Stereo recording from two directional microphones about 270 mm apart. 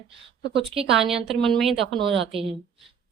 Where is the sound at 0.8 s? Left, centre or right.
Centre.